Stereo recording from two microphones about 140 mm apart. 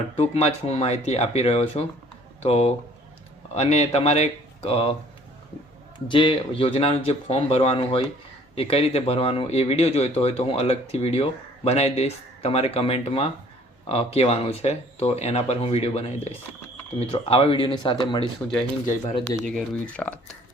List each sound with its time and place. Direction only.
0.2 s speech: 50° left (ahead or behind)
6.1 s speech: 35° left (ahead or behind)
19.4 s speech: 5° left (ahead or behind)